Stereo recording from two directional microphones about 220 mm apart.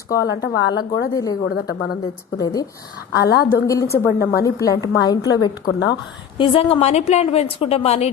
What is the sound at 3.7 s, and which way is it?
A woman's voice, 15° left (ahead or behind).